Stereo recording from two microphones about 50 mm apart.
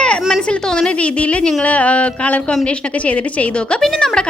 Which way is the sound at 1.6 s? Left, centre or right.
Left.